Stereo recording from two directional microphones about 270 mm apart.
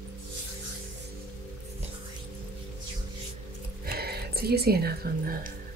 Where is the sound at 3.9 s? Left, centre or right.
Right.